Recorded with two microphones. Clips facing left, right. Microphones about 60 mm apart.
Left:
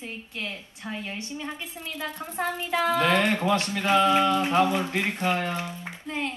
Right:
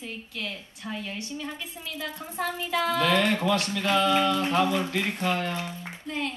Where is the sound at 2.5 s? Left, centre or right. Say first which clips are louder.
Left 2 dB; left.